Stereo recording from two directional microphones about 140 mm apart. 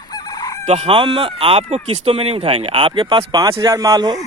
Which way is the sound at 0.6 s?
50° right (ahead or behind).